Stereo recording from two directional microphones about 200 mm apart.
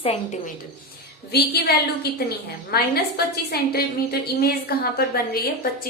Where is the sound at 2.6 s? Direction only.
50° left (ahead or behind).